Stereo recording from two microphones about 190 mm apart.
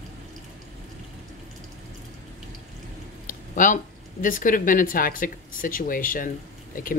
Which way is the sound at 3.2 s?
45° left (ahead or behind).